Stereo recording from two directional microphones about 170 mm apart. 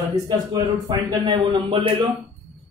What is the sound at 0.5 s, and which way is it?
A man's voice, 25° right (ahead or behind).